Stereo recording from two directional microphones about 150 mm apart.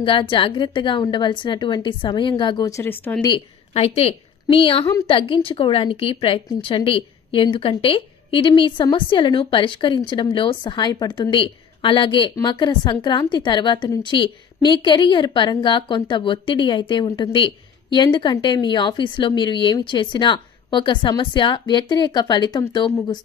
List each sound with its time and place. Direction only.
0.0 s a woman's voice: 35° left (ahead or behind); by 3.2 s 15° left (ahead or behind)
3.2 s speech: 30° left (ahead or behind)
3.7 s a woman's voice: 45° left (ahead or behind)